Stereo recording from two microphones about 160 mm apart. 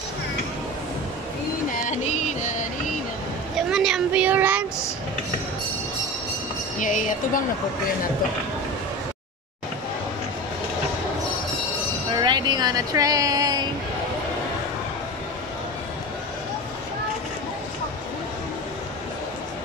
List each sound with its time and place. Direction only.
1.9 s a sound: 50° left (ahead or behind)
3.7 s speech: 5° right (ahead or behind)
6.8 s a woman's voice: 55° left (ahead or behind)
12.2 s speech: 25° right (ahead or behind)